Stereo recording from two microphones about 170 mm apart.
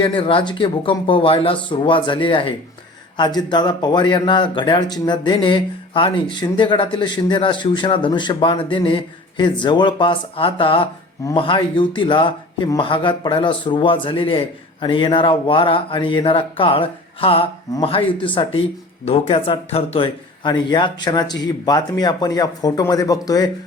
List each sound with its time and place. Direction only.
0.0 s speech: 30° left (ahead or behind)